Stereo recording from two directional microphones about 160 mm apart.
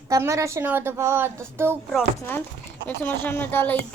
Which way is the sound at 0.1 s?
20° right (ahead or behind).